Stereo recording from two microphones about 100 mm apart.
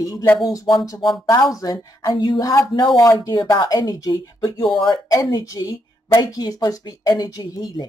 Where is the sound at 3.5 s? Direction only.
40° left (ahead or behind).